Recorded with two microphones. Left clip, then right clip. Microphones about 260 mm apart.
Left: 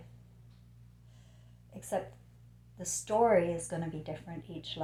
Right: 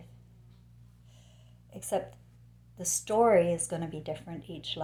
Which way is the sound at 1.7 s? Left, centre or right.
Right.